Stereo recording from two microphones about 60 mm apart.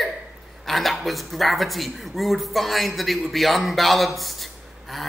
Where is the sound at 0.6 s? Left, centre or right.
Centre.